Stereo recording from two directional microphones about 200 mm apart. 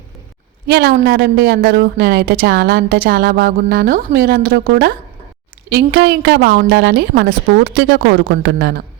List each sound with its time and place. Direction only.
0.7 s a woman's voice: 55° right (ahead or behind)